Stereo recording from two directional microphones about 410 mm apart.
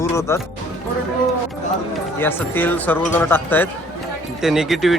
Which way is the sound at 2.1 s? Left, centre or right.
Centre.